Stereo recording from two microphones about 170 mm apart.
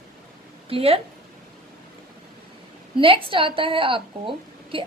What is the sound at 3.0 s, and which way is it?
A woman's voice, 30° right (ahead or behind).